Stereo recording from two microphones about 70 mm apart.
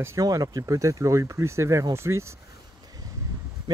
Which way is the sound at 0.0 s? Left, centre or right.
Right.